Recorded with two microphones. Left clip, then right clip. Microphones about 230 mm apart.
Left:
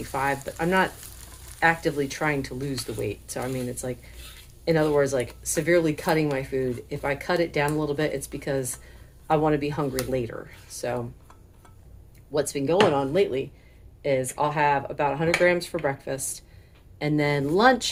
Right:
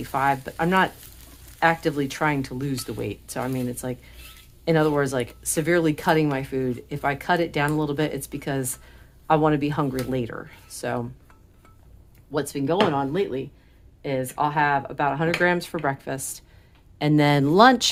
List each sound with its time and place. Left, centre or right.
0.1 s speech: right
12.5 s speech: right